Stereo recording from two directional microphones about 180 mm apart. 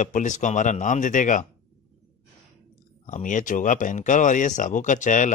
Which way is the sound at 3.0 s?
45° left (ahead or behind).